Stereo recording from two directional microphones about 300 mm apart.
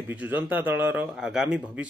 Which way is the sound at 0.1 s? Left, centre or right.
Centre.